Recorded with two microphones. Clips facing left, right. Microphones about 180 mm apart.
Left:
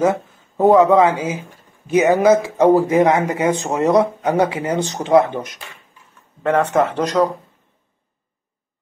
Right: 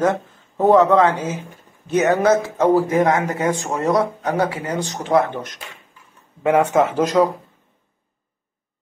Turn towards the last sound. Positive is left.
turn(degrees=-5)  # may be behind; listen again after turning